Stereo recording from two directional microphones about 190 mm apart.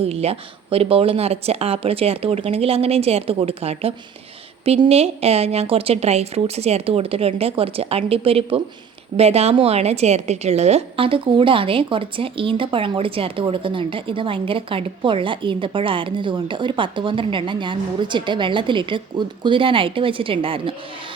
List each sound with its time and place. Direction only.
0.0 s a woman's voice: 30° right (ahead or behind)